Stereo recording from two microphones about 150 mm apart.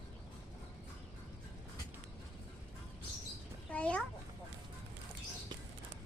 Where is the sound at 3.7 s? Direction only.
10° left (ahead or behind).